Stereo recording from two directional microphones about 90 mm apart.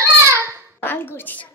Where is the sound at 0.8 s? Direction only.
20° left (ahead or behind).